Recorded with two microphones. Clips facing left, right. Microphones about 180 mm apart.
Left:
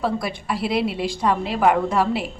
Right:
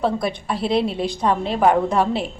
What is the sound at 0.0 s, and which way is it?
A woman's voice, 25° right (ahead or behind).